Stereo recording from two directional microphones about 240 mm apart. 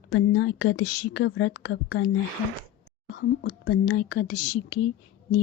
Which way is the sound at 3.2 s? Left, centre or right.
Left.